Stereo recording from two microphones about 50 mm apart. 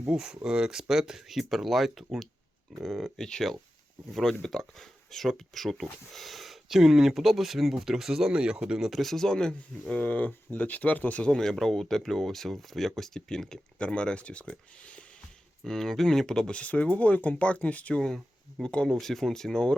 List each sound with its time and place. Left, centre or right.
0.1 s speech: centre
8.3 s speech: centre
8.9 s speech: centre
10.0 s speech: left
11.3 s speech: centre
13.0 s speech: centre
15.6 s speech: centre
16.5 s speech: left
18.6 s speech: centre